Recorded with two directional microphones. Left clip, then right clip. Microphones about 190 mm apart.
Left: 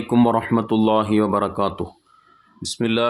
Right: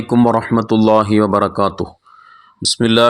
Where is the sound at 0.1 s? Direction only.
20° right (ahead or behind).